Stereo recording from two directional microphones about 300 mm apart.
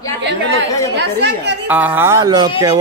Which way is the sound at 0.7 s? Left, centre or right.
Centre.